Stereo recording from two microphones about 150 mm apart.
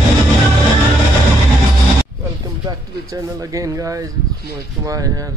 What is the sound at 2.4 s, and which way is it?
Speech, 25° right (ahead or behind).